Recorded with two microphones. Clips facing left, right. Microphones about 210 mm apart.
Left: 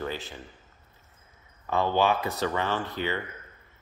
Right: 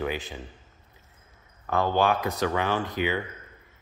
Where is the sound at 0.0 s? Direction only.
15° right (ahead or behind).